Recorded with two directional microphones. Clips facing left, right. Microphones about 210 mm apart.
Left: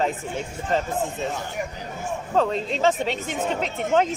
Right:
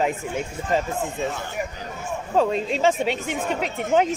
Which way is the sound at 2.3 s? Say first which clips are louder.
Right 2 dB; 10° right (ahead or behind).